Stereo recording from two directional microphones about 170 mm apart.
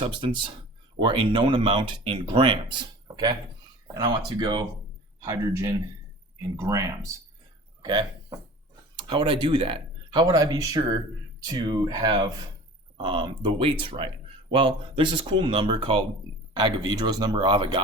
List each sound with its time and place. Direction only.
0.0 s speech: 30° right (ahead or behind)